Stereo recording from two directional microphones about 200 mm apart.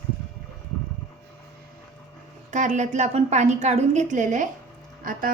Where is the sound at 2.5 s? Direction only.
35° right (ahead or behind).